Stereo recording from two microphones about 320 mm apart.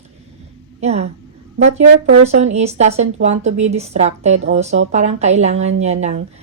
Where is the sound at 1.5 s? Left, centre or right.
Right.